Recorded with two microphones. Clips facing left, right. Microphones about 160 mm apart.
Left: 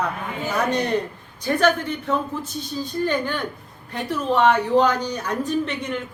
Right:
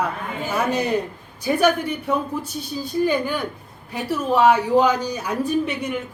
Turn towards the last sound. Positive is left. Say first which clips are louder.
# right 2 dB
turn(degrees=-10)  # may be behind; listen again after turning